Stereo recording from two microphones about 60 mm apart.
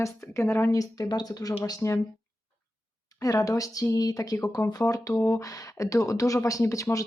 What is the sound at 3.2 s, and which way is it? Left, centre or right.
Speech, left.